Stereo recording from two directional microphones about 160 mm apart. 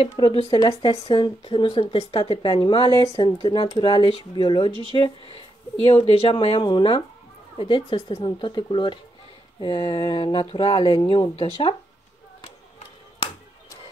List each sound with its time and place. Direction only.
0.2 s speech: 30° left (ahead or behind)